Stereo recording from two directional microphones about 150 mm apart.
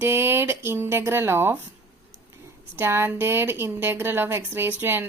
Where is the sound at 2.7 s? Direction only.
15° right (ahead or behind).